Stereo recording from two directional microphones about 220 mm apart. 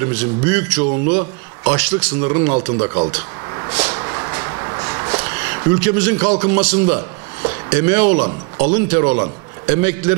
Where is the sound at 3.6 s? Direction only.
20° right (ahead or behind).